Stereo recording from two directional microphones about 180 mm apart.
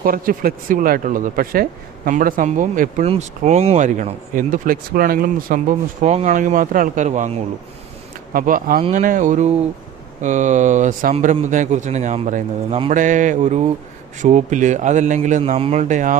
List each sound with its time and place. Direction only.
0.0 s speech: 55° right (ahead or behind)
8.3 s speech: 50° right (ahead or behind)